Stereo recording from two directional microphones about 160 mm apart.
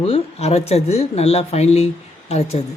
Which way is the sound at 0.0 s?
40° left (ahead or behind).